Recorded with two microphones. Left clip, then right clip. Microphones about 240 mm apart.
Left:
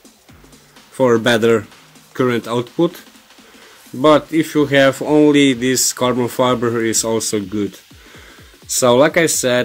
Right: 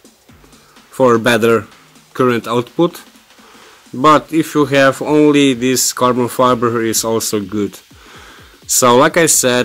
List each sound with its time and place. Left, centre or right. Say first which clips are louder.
0.9 s speech: right 2 dB; centre
4.0 s speech: right 2 dB; centre